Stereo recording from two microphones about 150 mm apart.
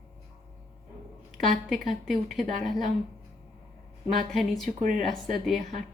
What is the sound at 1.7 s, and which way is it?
A woman's voice, centre (ahead or behind).